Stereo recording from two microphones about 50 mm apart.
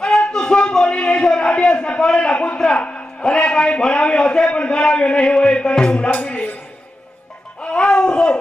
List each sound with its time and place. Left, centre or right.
0.0 s a sound: centre
2.6 s a man's voice: centre
7.6 s music: centre